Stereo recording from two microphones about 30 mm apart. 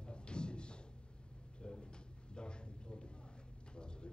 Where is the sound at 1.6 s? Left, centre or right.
Left.